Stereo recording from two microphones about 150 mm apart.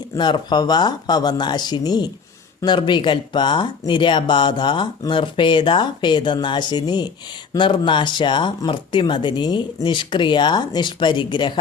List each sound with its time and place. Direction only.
0.2 s speech: 30° left (ahead or behind)